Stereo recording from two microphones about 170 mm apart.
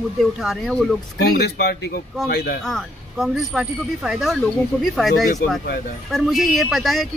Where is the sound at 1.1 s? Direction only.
75° left (ahead or behind).